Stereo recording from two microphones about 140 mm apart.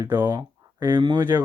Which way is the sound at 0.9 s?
30° right (ahead or behind).